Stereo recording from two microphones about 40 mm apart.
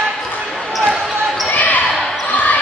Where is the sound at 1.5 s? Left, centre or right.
Left.